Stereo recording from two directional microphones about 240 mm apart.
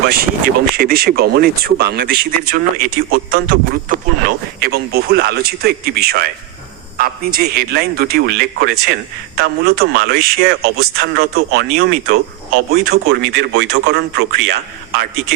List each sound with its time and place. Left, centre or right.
0.0 s speech: right